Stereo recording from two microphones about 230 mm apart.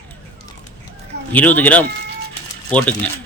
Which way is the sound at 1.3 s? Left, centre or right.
Centre.